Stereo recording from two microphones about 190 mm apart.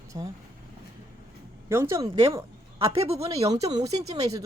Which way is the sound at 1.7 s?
15° right (ahead or behind).